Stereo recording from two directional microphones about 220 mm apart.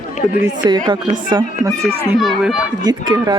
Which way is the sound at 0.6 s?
20° right (ahead or behind).